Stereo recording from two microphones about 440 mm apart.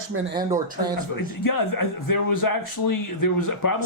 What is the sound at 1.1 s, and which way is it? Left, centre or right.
Speech, left.